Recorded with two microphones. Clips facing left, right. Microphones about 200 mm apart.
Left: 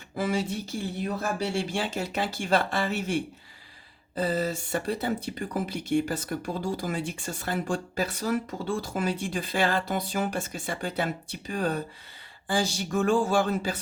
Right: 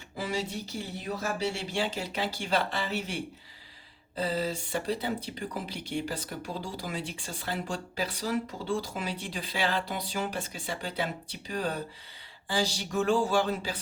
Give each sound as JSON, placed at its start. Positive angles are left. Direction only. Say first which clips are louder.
{"t": 0.2, "sound": "speech", "louder": "left 5 dB", "side_deg": 50}